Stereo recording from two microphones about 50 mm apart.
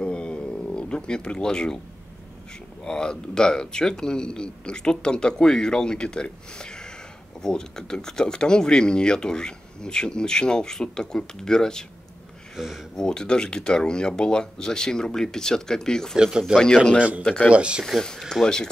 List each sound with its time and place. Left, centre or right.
0.0 s a sound: left
2.8 s speech: centre
12.5 s speech: centre
12.9 s speech: centre
16.2 s speech: centre
16.5 s speech: centre
17.5 s speech: right
17.8 s speech: centre